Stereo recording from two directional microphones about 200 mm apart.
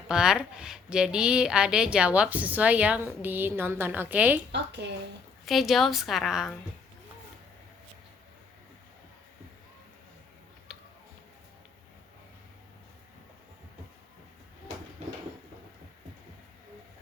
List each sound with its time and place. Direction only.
0.1 s a woman's voice: 5° right (ahead or behind)
4.5 s a woman's voice: 60° right (ahead or behind)
5.5 s a woman's voice: centre (ahead or behind)